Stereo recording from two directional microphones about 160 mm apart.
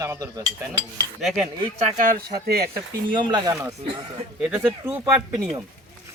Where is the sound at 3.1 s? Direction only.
30° right (ahead or behind).